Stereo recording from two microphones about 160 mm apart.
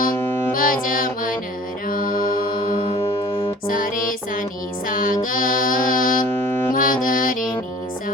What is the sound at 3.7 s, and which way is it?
Music, 60° left (ahead or behind).